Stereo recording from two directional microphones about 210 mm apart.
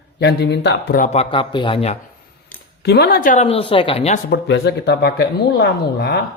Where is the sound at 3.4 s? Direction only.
25° left (ahead or behind).